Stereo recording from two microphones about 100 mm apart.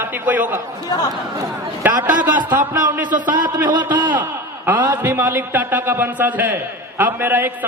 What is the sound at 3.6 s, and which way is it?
A man's voice, 15° right (ahead or behind).